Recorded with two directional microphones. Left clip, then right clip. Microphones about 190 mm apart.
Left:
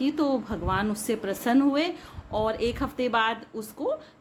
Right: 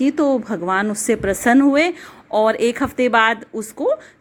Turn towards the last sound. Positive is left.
turn(degrees=-35)  # may be behind; listen again after turning